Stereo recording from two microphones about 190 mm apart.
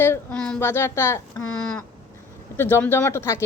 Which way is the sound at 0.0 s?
10° left (ahead or behind).